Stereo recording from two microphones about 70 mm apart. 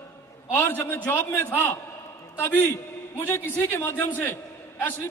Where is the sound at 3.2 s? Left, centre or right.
Left.